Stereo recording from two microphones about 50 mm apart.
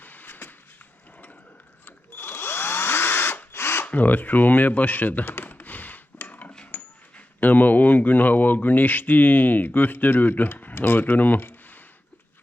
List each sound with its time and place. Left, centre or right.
0.0 s vehicle: left
2.1 s drill: left
3.8 s a sound: left
7.3 s speech: left